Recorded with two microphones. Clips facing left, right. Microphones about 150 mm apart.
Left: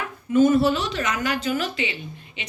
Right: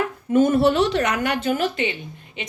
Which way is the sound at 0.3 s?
55° right (ahead or behind).